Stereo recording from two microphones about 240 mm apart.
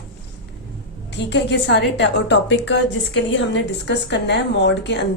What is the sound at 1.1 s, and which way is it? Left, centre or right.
Speech, left.